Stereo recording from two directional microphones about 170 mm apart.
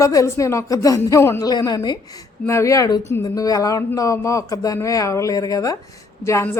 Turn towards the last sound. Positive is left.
turn(degrees=15)  # may be behind; listen again after turning